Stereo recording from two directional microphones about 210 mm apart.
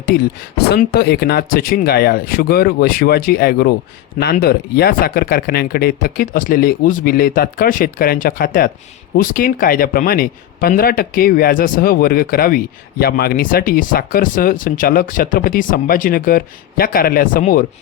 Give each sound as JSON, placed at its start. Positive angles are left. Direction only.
{"t": 0.7, "sound": "speech", "side_deg": 50}